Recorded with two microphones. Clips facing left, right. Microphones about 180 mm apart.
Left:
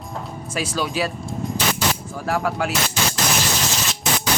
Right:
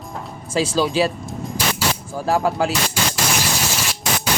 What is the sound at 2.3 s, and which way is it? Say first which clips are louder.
Speech: right 4 dB; 30° right (ahead or behind).